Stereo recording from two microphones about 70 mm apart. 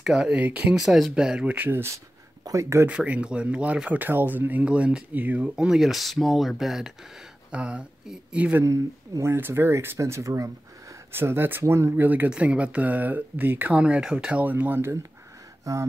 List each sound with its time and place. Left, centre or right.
0.0 s speech: centre
0.7 s speech: centre
1.7 s speech: right
2.9 s speech: centre
4.0 s speech: right
4.6 s speech: centre
7.5 s speech: centre
9.2 s speech: right
9.9 s speech: right
11.1 s speech: right
12.3 s speech: centre
13.7 s speech: centre
14.4 s speech: right
15.7 s speech: right